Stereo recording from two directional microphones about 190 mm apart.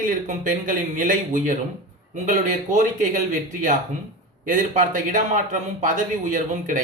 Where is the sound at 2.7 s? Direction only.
40° right (ahead or behind).